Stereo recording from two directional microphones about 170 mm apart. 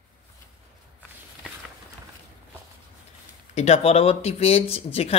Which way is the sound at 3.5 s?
40° left (ahead or behind).